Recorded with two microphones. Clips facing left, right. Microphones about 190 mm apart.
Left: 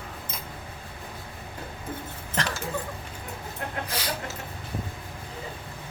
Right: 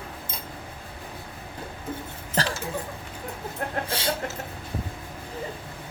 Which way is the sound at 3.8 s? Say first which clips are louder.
Right 3 dB; 30° right (ahead or behind).